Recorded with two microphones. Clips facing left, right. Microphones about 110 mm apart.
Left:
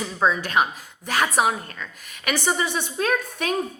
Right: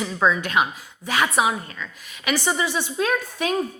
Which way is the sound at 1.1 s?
50° left (ahead or behind).